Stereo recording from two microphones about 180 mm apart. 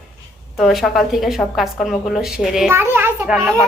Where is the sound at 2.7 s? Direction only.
15° right (ahead or behind).